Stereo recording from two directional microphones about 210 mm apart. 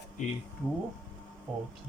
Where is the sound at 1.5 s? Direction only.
5° right (ahead or behind).